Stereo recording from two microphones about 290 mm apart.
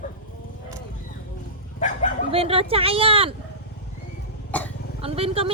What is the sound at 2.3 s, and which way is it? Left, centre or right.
Speech, centre.